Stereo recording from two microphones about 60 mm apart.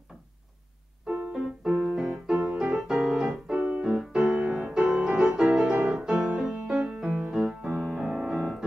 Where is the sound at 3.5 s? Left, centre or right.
Right.